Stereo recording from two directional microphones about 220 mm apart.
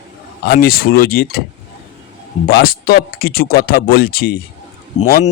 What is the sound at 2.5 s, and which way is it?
Speech, 45° left (ahead or behind).